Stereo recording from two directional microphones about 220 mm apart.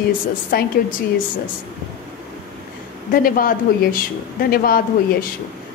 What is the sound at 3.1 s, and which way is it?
A man's voice, 40° left (ahead or behind).